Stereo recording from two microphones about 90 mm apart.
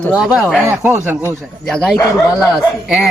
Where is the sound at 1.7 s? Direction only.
5° left (ahead or behind).